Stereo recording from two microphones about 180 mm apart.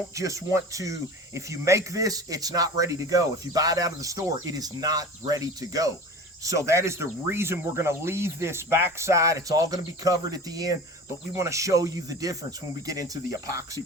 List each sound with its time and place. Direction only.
0.2 s speech: 15° right (ahead or behind)